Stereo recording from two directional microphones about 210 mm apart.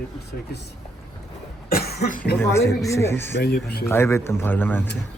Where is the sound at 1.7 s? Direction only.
50° left (ahead or behind).